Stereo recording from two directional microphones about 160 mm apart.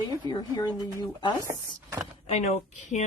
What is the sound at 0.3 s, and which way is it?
Speech, 25° left (ahead or behind).